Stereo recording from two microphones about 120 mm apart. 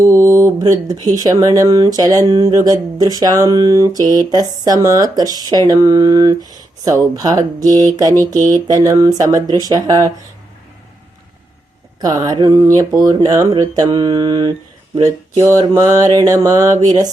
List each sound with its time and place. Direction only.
0.0 s speech: 25° right (ahead or behind)
8.2 s mantra: 30° right (ahead or behind)
8.6 s speech: 30° right (ahead or behind)
11.9 s speech: 35° right (ahead or behind)
15.0 s mantra: 30° right (ahead or behind)
16.8 s speech: 30° right (ahead or behind)